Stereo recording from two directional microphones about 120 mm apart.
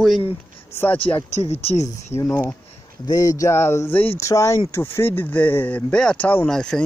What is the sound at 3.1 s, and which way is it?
Speech, 30° left (ahead or behind).